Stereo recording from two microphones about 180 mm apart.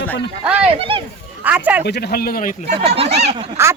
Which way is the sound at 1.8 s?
65° left (ahead or behind).